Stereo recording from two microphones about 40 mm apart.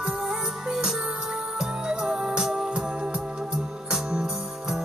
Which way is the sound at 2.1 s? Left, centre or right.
Right.